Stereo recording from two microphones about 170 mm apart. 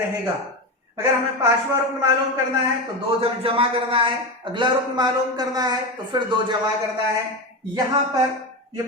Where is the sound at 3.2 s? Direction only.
35° right (ahead or behind).